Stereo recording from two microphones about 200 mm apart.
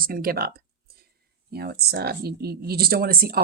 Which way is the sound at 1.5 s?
50° right (ahead or behind).